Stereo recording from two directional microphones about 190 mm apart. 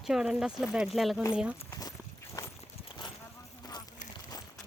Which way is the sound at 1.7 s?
20° left (ahead or behind).